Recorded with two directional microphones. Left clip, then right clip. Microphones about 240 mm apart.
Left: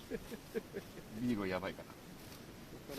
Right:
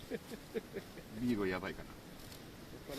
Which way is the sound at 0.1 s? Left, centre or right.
Centre.